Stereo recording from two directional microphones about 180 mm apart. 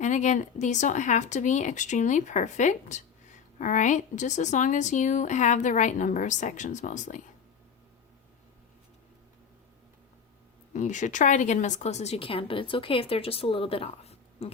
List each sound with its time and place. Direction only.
0.0 s speech: 40° left (ahead or behind)
10.8 s a woman's voice: 45° left (ahead or behind)